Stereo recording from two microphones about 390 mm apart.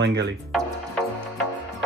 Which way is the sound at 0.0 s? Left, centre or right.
Right.